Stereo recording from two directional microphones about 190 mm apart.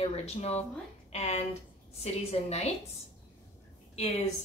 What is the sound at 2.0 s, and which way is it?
Speech, 35° left (ahead or behind).